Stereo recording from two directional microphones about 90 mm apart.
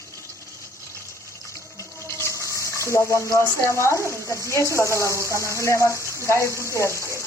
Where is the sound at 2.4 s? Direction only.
35° left (ahead or behind).